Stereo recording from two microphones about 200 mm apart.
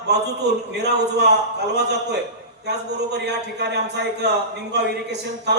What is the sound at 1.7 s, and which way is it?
A man's voice, 55° right (ahead or behind).